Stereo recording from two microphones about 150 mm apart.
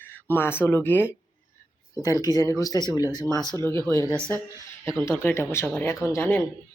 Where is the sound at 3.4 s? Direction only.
20° right (ahead or behind).